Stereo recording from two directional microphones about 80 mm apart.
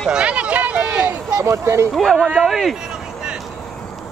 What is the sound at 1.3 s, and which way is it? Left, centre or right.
Speech, right.